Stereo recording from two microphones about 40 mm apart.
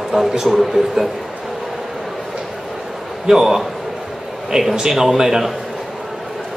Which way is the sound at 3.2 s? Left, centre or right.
Centre.